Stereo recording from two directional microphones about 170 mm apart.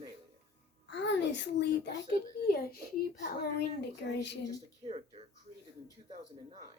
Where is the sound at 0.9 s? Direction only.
90° left.